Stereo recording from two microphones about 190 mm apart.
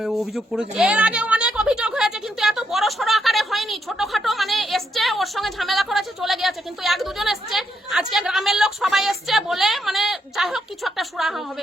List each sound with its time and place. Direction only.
0.0 s speech: centre (ahead or behind)